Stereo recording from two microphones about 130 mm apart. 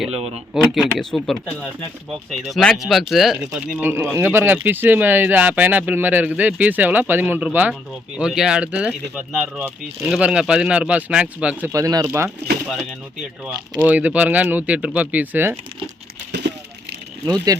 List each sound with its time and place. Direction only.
0.1 s speech: 50° right (ahead or behind)
0.5 s speech: 5° right (ahead or behind)
1.5 s speech: 10° left (ahead or behind); by 3.8 s 5° right (ahead or behind)
3.8 s speech: 15° right (ahead or behind)
11.7 s speech: 25° right (ahead or behind)
13.4 s speech: 10° right (ahead or behind)
17.2 s speech: 30° right (ahead or behind)